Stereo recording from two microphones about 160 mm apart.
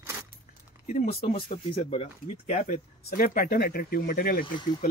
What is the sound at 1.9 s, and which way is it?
Speech, 45° left (ahead or behind).